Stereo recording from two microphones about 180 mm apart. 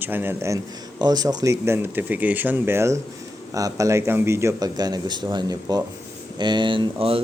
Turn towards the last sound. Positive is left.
turn(degrees=-30)  # may be behind; listen again after turning